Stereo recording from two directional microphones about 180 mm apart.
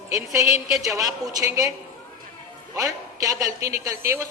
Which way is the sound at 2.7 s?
20° right (ahead or behind).